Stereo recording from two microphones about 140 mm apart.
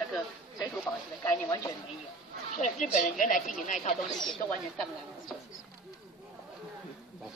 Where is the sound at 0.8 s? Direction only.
20° left (ahead or behind).